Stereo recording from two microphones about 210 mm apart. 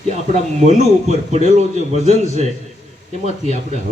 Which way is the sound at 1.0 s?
35° right (ahead or behind).